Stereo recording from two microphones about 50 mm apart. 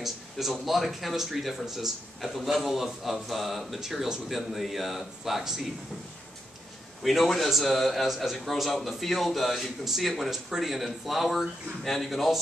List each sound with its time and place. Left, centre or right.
0.0 s speech: centre
7.0 s speech: centre